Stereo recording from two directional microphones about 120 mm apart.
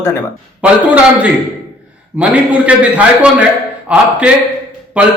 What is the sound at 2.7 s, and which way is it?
A man's voice, 10° right (ahead or behind).